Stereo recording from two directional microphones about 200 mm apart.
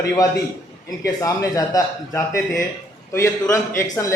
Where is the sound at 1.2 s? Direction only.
15° left (ahead or behind).